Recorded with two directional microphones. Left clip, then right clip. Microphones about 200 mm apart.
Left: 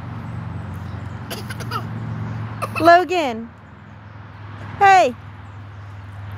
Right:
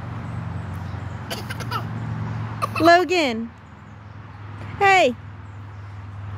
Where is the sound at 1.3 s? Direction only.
10° right (ahead or behind).